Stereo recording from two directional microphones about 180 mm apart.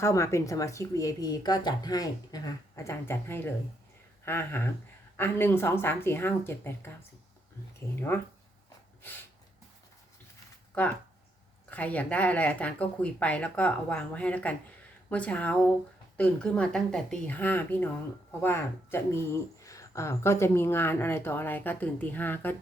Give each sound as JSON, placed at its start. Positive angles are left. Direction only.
{"t": 0.0, "sound": "speech", "side_deg": 15}
{"t": 11.7, "sound": "speech", "side_deg": 10}